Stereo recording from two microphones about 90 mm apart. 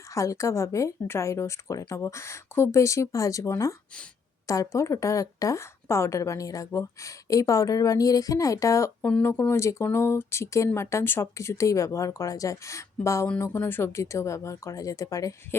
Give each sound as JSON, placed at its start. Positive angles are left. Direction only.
{"t": 0.1, "sound": "a woman's voice", "side_deg": 35}
{"t": 9.0, "sound": "speech", "side_deg": 10}
{"t": 9.2, "sound": "a woman's voice", "side_deg": 25}